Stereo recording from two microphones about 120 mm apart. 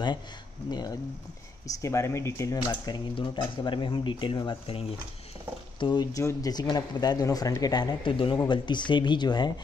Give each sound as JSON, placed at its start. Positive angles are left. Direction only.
{"t": 0.7, "sound": "speech", "side_deg": 35}
{"t": 1.8, "sound": "speech", "side_deg": 25}
{"t": 3.2, "sound": "speech", "side_deg": 45}
{"t": 5.8, "sound": "speech", "side_deg": 40}
{"t": 6.1, "sound": "speech", "side_deg": 30}